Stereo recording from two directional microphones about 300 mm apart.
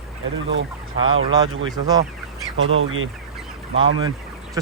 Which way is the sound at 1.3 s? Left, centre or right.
Centre.